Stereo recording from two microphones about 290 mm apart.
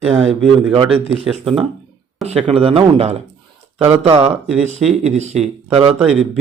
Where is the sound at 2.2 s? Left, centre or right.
Right.